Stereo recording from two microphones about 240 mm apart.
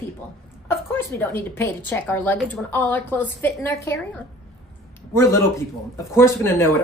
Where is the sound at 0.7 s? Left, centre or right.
Centre.